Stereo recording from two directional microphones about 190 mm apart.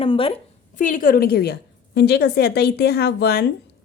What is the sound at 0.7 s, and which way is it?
A woman's voice, 45° left (ahead or behind).